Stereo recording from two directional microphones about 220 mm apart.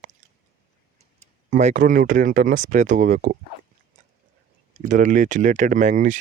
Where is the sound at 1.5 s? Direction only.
35° right (ahead or behind).